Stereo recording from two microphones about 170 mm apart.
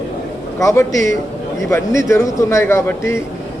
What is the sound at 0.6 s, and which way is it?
A man's voice, 20° left (ahead or behind).